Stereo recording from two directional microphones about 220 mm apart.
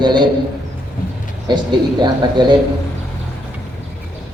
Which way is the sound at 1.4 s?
20° right (ahead or behind).